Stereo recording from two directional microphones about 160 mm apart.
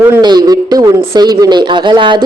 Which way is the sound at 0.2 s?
25° right (ahead or behind).